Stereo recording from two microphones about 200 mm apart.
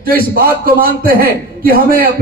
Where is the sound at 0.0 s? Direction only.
45° right (ahead or behind).